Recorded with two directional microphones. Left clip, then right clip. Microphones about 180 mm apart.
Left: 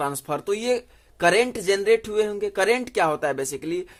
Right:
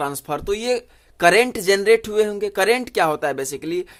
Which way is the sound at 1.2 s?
30° right (ahead or behind).